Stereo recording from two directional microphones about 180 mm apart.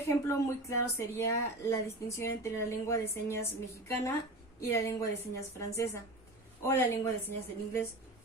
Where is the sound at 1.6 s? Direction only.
15° left (ahead or behind).